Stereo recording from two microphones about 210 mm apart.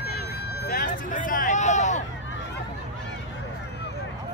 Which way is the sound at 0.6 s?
40° left (ahead or behind).